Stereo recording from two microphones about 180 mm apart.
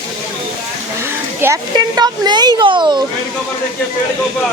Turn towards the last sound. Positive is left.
turn(degrees=-25)  # may be behind; listen again after turning